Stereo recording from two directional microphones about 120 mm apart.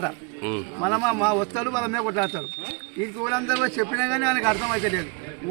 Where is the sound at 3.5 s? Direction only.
15° left (ahead or behind).